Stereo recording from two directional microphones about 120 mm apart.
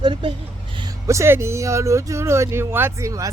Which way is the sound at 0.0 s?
40° right (ahead or behind).